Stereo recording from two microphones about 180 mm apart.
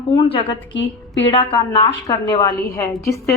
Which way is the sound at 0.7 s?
85° left.